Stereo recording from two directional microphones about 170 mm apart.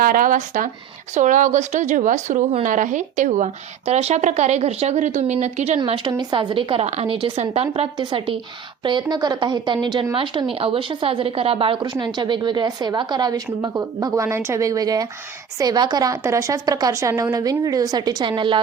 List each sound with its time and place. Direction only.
0.0 s speech: 55° right (ahead or behind)
6.1 s a woman's voice: 25° right (ahead or behind)